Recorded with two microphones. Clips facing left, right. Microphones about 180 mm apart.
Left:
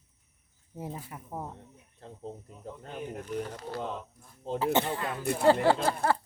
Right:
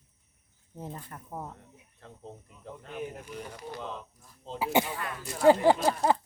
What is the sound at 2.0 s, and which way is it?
Speech, 35° left (ahead or behind).